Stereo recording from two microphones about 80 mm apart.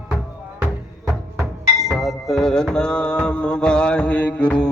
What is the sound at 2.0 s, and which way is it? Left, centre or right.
Music, centre.